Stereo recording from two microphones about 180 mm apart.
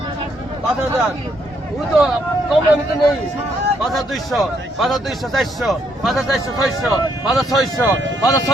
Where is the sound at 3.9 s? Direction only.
Centre (ahead or behind).